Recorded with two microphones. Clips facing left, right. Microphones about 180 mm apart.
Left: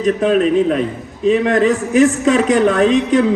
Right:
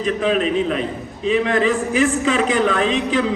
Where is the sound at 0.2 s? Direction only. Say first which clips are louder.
Left 4 dB; 50° left (ahead or behind).